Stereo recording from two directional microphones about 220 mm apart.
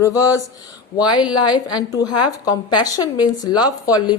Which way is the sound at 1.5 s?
15° left (ahead or behind).